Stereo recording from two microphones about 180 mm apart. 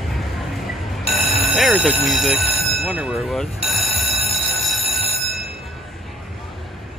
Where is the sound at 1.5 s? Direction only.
5° right (ahead or behind).